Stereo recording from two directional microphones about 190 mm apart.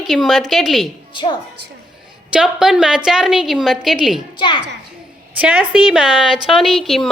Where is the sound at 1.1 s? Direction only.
25° left (ahead or behind).